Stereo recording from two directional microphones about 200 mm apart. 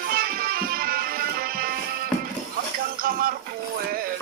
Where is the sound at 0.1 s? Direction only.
45° right (ahead or behind).